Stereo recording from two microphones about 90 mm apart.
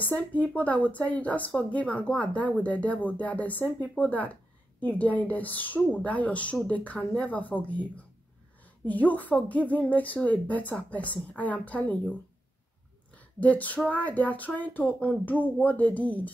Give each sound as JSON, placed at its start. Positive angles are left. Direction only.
{"t": 0.0, "sound": "a woman's voice", "side_deg": 20}
{"t": 8.8, "sound": "a woman's voice", "side_deg": 20}
{"t": 13.1, "sound": "a sound", "side_deg": 15}
{"t": 13.8, "sound": "a woman's voice", "side_deg": 15}